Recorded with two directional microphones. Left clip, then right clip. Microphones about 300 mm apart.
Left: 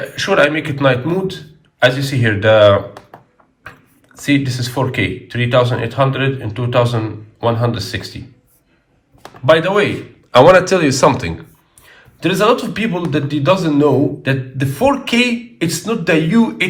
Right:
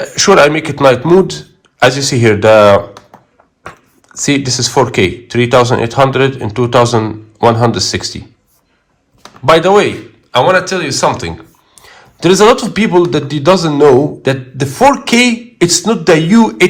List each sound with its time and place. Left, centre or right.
0.1 s speech: centre
9.6 s speech: centre
10.3 s speech: centre
11.8 s speech: centre